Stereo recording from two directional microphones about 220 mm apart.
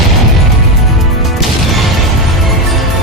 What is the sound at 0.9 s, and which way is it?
Music, centre (ahead or behind).